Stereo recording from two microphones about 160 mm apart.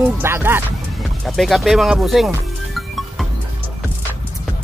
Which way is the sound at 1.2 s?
Centre (ahead or behind).